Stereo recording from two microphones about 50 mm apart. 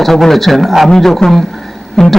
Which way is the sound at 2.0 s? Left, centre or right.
Centre.